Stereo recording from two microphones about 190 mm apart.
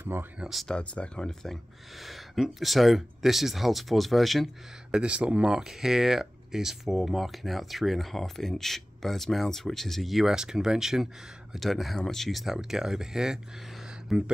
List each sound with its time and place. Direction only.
0.0 s speech: 10° right (ahead or behind)